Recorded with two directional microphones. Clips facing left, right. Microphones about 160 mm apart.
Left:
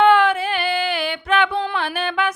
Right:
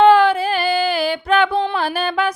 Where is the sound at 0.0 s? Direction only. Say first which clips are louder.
Right 3 dB; 30° right (ahead or behind).